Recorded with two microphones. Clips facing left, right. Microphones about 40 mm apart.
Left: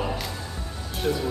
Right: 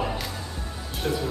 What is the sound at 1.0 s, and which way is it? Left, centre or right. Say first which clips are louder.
Speech: left 2 dB; centre.